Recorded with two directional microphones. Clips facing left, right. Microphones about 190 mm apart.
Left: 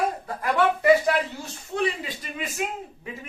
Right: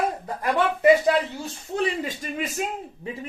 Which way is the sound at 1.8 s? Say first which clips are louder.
Right 1 dB; 45° right (ahead or behind).